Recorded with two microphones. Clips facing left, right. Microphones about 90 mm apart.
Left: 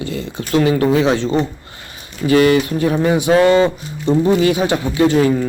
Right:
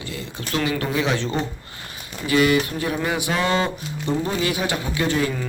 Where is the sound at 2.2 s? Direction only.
35° left (ahead or behind).